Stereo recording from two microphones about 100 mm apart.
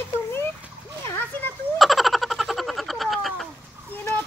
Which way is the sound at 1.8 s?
Centre (ahead or behind).